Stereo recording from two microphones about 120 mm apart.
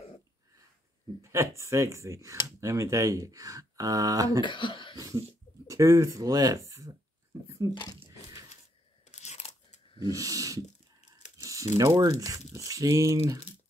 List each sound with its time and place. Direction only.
1.2 s speech: 20° right (ahead or behind)
4.4 s speech: 40° left (ahead or behind)
4.9 s cough: 30° right (ahead or behind)
5.7 s speech: 25° right (ahead or behind)
8.1 s a sound: 30° right (ahead or behind)
9.0 s crunch: 70° left (ahead or behind)
10.0 s speech: 30° right (ahead or behind)
11.3 s crumpling: 30° right (ahead or behind)
12.0 s speech: 30° right (ahead or behind)